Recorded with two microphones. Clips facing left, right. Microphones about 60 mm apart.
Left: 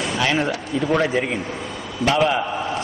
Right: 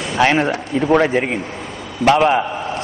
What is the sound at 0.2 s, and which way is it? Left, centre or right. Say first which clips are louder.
A man's voice: right 8 dB; right.